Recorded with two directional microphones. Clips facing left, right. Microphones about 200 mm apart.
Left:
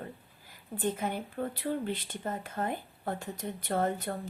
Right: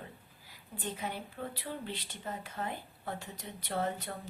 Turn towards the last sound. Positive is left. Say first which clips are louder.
# left 5 dB
turn(degrees=50)  # may be behind; listen again after turning